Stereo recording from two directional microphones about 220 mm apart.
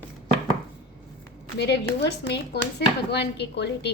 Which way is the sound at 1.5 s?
50° left (ahead or behind).